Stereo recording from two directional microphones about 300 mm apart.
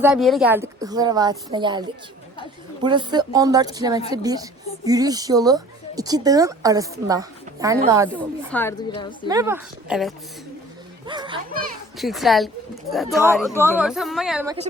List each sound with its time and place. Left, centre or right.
0.0 s a woman's voice: centre
2.8 s a woman's voice: centre
8.4 s a woman's voice: centre
9.2 s a woman's voice: centre
11.0 s speech: centre
11.9 s a woman's voice: centre